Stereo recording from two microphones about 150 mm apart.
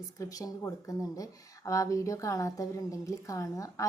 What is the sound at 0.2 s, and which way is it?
Speech, 25° left (ahead or behind).